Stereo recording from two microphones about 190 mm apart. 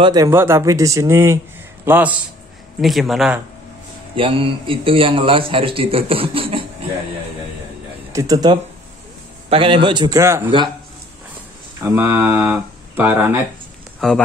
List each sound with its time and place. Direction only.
0.0 s a man's voice: 20° right (ahead or behind); by 3.3 s centre (ahead or behind)
4.2 s speech: 30° right (ahead or behind)
8.1 s speech: 20° right (ahead or behind)
11.8 s speech: 15° right (ahead or behind)
13.9 s speech: 5° left (ahead or behind)